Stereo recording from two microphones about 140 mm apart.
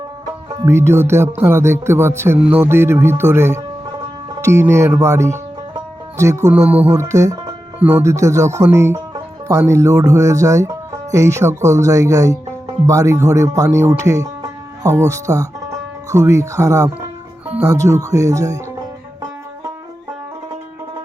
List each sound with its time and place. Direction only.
0.6 s music: 20° right (ahead or behind)
4.4 s speech: 20° right (ahead or behind)